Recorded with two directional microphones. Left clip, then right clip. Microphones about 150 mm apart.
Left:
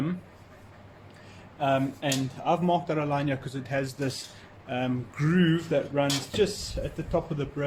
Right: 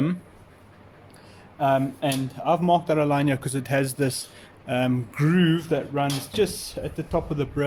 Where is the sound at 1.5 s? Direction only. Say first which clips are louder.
Right 4 dB; 65° right (ahead or behind).